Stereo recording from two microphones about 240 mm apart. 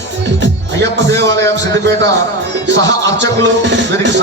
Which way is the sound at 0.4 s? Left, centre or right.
Right.